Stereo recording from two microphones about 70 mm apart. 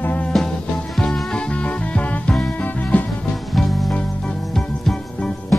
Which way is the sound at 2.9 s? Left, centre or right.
Left.